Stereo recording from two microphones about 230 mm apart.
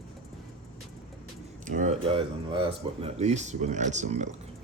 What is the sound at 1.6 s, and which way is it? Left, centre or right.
Speech, right.